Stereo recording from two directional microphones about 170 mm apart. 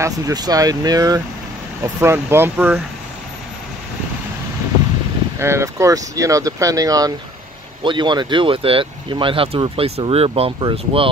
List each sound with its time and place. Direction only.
0.0 s speech: 20° right (ahead or behind)
5.4 s speech: 15° right (ahead or behind); by 11.1 s 30° right (ahead or behind)